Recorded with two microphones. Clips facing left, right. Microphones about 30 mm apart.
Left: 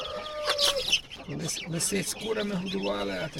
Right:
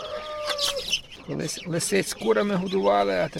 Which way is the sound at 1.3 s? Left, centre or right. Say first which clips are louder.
Right 5 dB; right.